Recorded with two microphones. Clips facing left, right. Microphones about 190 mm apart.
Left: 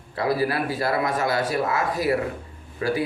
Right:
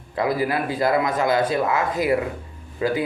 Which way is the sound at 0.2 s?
20° right (ahead or behind).